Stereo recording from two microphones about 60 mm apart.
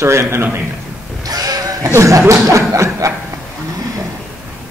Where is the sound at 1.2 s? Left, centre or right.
Right.